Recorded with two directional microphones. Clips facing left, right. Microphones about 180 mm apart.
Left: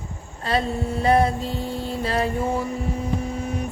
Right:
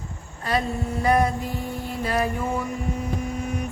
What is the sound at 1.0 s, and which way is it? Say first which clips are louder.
Music: left 2 dB; 25° left (ahead or behind).